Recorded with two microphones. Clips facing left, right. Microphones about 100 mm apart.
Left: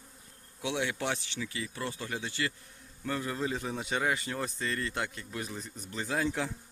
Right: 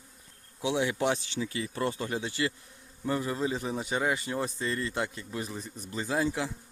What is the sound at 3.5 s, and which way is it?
Speech, 5° right (ahead or behind).